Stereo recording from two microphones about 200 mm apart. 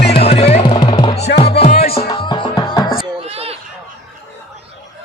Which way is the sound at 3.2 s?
30° right (ahead or behind).